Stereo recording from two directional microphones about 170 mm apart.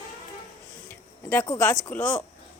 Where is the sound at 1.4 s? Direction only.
20° left (ahead or behind).